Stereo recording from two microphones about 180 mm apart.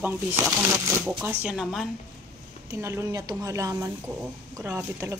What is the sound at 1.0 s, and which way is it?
Speech, 5° right (ahead or behind).